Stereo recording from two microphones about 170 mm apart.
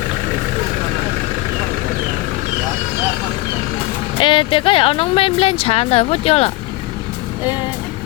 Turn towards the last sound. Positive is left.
turn(degrees=35)  # may be behind; listen again after turning